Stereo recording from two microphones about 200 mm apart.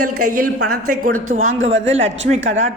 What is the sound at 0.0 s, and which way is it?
A woman's voice, 45° right (ahead or behind).